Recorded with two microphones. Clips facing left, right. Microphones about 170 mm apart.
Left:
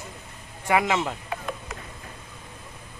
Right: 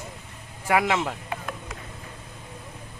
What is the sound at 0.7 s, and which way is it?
Speech, centre (ahead or behind).